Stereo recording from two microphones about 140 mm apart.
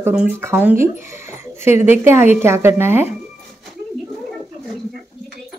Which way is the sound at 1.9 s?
15° right (ahead or behind).